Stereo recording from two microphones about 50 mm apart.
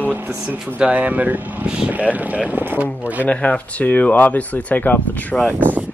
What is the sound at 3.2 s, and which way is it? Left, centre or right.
Speech, left.